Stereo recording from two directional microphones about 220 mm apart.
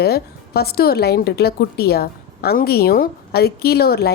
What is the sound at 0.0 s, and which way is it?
A woman's voice, 45° left (ahead or behind).